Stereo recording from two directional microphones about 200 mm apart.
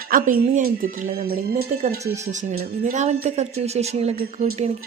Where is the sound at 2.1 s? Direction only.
35° right (ahead or behind).